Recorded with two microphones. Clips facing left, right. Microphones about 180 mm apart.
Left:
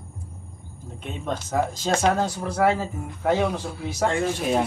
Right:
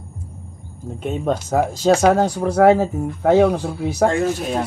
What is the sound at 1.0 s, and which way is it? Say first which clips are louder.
Speech: right 9 dB; 45° right (ahead or behind).